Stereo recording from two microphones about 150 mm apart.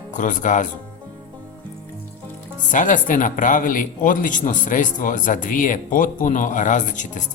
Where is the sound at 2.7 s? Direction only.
60° left (ahead or behind).